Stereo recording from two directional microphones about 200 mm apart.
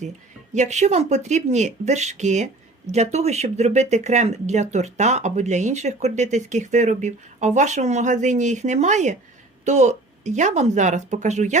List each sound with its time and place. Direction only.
0.5 s speech: 35° right (ahead or behind)